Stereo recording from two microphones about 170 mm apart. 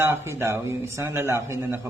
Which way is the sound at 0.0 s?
15° right (ahead or behind).